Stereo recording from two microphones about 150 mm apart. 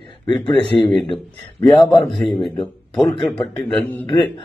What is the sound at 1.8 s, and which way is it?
Speech, 30° left (ahead or behind).